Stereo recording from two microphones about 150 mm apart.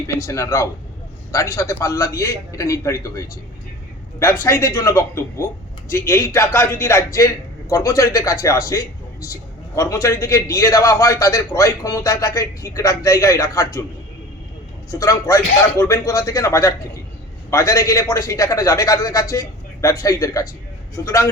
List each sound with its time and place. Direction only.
0.2 s speech: 20° left (ahead or behind)
14.8 s speech: 20° left (ahead or behind)